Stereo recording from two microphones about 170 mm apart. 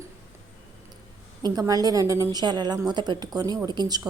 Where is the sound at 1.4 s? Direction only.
20° right (ahead or behind).